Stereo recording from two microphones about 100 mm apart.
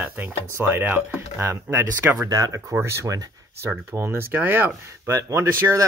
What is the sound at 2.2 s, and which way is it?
Speech, 40° right (ahead or behind).